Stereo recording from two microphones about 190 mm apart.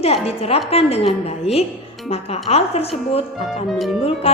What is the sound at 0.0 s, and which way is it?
A woman's voice, 30° left (ahead or behind).